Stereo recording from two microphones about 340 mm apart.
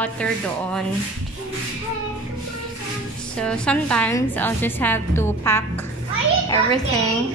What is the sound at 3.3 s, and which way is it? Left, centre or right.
A woman's voice, centre.